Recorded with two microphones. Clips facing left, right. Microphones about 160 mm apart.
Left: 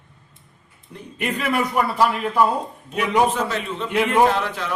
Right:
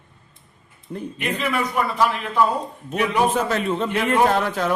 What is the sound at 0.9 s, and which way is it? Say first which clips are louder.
Speech: right 9 dB; 50° right (ahead or behind).